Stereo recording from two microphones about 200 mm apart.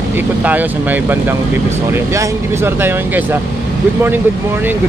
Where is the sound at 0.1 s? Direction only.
10° right (ahead or behind).